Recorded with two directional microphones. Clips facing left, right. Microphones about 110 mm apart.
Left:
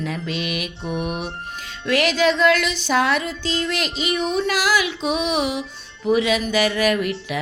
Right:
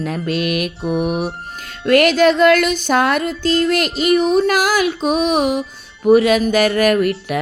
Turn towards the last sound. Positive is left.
turn(degrees=-50)  # may be behind; listen again after turning